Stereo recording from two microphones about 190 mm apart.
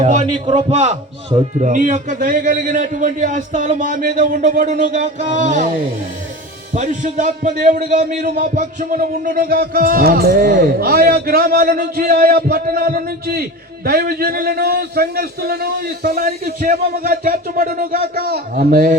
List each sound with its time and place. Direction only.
0.0 s a man's voice: 40° right (ahead or behind)
0.3 s speech: 25° right (ahead or behind); by 5.7 s 40° right (ahead or behind)
6.7 s a man's voice: 40° right (ahead or behind)